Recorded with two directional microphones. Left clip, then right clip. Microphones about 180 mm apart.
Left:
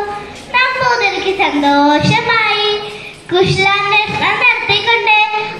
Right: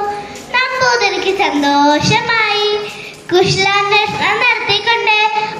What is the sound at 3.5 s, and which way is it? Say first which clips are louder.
Child singing: even; 30° left (ahead or behind).